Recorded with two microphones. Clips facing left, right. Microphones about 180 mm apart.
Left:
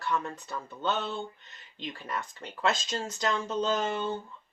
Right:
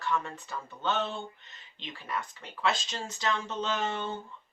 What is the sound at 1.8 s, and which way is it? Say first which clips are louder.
Speech: left 1 dB; 45° left (ahead or behind).